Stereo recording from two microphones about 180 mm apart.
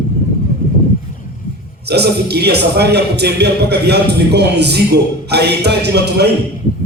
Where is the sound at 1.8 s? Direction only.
65° right (ahead or behind).